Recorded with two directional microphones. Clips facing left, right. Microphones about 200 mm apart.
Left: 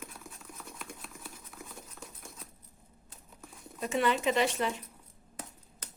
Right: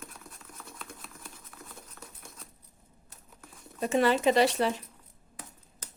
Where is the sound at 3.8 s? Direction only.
40° right (ahead or behind).